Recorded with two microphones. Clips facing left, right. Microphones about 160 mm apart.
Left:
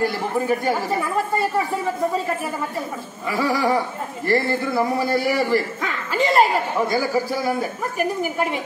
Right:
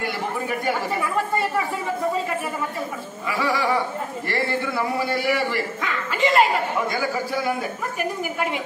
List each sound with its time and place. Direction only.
0.0 s a man's voice: 40° left (ahead or behind)
3.3 s a man's voice: 40° left (ahead or behind)